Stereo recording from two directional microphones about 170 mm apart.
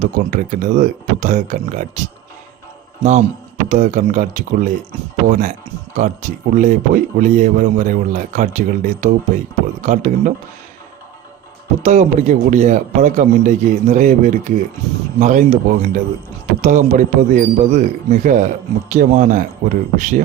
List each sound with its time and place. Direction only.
0.0 s speech: 50° right (ahead or behind)
11.8 s speech: 45° right (ahead or behind)